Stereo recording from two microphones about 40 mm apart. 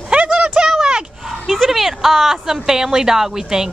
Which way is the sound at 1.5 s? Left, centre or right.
Centre.